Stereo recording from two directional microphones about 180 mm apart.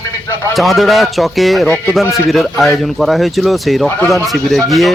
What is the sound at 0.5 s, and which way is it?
Speech, centre (ahead or behind).